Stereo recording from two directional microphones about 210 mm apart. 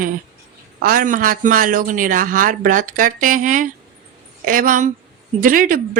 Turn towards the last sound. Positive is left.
turn(degrees=-40)  # may be behind; listen again after turning